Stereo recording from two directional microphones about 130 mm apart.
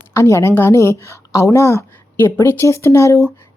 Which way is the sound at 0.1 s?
25° left (ahead or behind).